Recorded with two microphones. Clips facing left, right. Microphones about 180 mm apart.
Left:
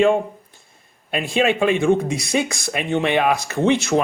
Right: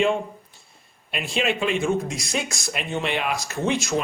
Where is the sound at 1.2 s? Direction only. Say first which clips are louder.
Left 6 dB; 50° left (ahead or behind).